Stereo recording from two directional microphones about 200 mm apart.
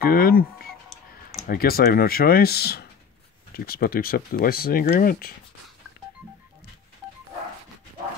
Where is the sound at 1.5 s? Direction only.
50° left (ahead or behind).